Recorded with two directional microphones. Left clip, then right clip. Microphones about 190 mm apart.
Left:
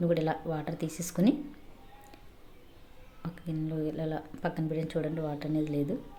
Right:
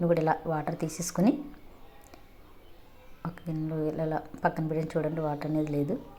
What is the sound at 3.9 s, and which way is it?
Speech, centre (ahead or behind).